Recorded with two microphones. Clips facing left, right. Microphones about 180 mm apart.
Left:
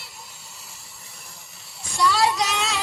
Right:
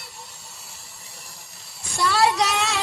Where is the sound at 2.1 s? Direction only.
60° right (ahead or behind).